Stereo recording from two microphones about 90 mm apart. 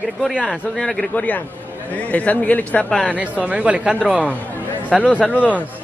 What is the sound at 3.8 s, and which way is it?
Speech, 5° right (ahead or behind).